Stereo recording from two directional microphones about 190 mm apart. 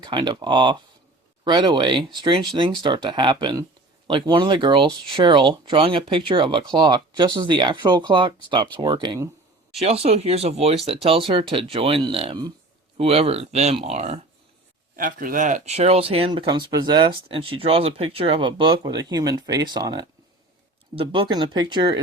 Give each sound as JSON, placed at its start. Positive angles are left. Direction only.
{"t": 0.0, "sound": "speech", "side_deg": -25}
{"t": 9.7, "sound": "speech", "side_deg": -30}
{"t": 14.9, "sound": "speech", "side_deg": -45}